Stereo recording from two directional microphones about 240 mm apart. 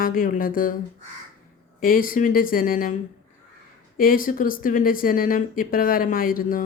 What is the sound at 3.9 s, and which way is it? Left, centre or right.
Speech, left.